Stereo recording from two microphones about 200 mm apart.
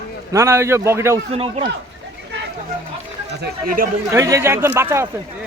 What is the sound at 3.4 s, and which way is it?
Speech, 45° right (ahead or behind).